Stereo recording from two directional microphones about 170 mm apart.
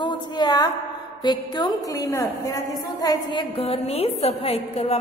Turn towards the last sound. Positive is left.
turn(degrees=35)  # may be behind; listen again after turning